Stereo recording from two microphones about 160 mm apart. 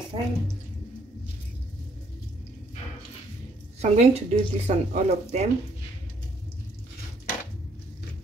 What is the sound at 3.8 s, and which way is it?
A woman's voice, 40° right (ahead or behind).